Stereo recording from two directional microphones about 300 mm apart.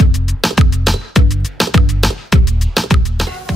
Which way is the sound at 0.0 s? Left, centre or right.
Centre.